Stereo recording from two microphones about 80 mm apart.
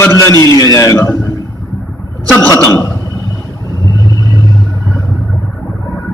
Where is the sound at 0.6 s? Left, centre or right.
Left.